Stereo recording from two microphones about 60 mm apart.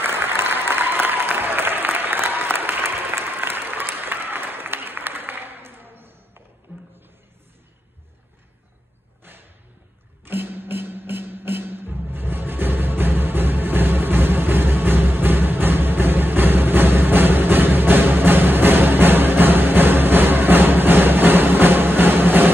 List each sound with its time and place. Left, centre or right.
0.0 s applause: right
6.7 s a sound: right
10.2 s music: right